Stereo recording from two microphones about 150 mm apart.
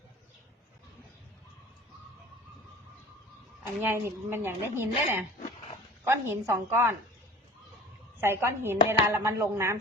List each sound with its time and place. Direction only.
3.8 s a woman's voice: 15° right (ahead or behind)
8.2 s a woman's voice: 15° right (ahead or behind)